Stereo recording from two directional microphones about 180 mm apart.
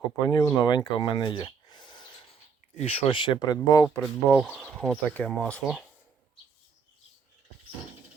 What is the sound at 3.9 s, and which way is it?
Speech, 5° left (ahead or behind).